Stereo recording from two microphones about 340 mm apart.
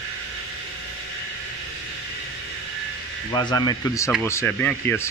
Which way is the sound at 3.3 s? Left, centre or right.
Centre.